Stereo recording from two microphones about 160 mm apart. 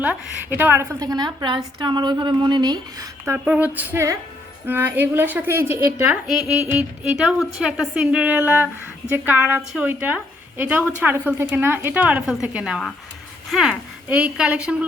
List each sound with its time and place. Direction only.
0.0 s a woman's voice: 10° right (ahead or behind)